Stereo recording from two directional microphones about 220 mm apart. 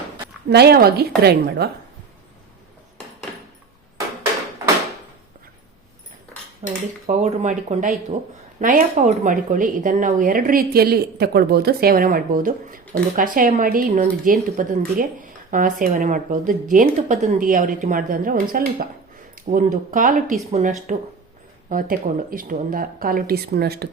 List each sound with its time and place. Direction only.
0.5 s a woman's voice: 45° right (ahead or behind)
7.1 s a woman's voice: 35° right (ahead or behind)